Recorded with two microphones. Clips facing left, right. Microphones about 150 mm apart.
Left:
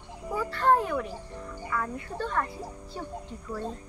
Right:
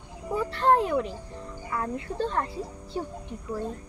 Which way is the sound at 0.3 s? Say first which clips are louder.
Right 1 dB; 20° right (ahead or behind).